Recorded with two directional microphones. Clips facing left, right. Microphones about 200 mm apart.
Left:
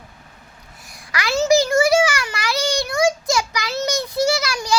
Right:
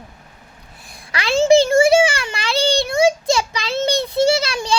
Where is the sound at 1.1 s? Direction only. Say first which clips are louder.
Right 4 dB; 25° right (ahead or behind).